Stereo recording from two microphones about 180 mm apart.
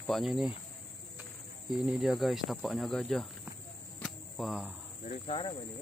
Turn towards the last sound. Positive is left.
turn(degrees=30)  # may be behind; listen again after turning